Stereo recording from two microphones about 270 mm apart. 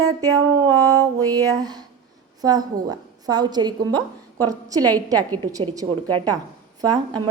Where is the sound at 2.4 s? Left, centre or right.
Centre.